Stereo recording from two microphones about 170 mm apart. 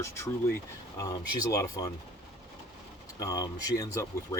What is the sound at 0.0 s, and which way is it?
Speech, 15° left (ahead or behind).